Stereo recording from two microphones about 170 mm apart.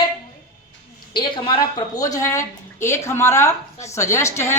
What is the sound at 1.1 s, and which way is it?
A woman's voice, 30° left (ahead or behind).